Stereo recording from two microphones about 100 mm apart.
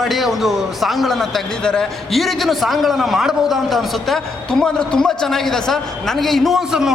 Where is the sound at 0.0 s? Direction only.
Centre (ahead or behind).